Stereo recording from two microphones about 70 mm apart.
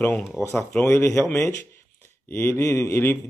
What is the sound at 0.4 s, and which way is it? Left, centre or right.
A man's voice, left.